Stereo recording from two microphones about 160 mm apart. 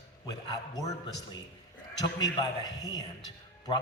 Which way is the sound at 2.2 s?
25° left (ahead or behind).